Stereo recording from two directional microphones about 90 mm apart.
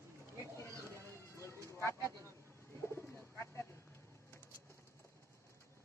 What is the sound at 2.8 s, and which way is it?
Bird, 30° left (ahead or behind).